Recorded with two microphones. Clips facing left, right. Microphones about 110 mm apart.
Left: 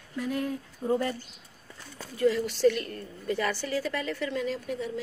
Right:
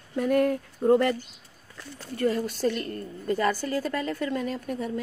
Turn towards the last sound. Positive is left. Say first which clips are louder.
# right 2 dB
turn(degrees=-50)  # may be behind; listen again after turning